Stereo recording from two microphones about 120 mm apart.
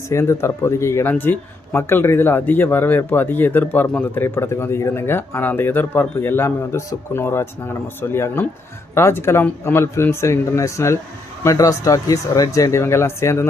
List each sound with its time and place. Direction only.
0.1 s speech: 20° left (ahead or behind)